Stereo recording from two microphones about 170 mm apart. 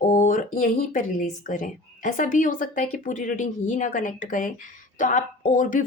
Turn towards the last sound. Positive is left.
turn(degrees=50)  # may be behind; listen again after turning